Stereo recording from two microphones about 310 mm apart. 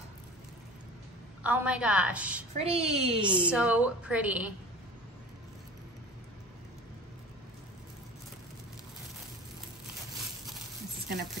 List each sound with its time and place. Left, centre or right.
1.4 s a woman's voice: centre
2.5 s a woman's voice: centre
3.4 s a woman's voice: centre